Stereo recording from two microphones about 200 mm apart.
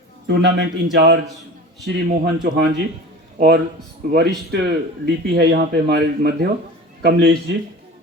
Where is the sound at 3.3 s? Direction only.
55° right (ahead or behind).